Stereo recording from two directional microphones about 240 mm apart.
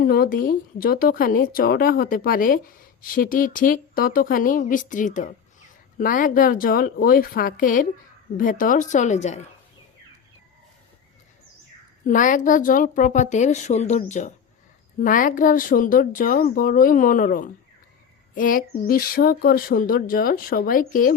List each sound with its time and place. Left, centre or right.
0.0 s speech: left
12.0 s speech: left